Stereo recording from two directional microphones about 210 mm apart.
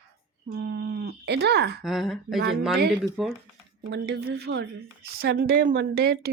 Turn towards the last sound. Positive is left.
turn(degrees=-50)  # may be behind; listen again after turning